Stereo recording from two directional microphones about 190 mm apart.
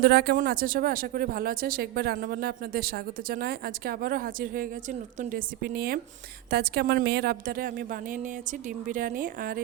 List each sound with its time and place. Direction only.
0.0 s speech: 60° right (ahead or behind)